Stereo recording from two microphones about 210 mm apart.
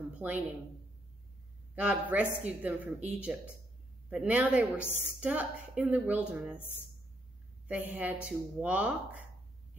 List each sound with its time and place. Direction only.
0.2 s a woman's voice: 10° right (ahead or behind)
1.8 s a woman's voice: 5° right (ahead or behind)
7.6 s a woman's voice: 10° right (ahead or behind)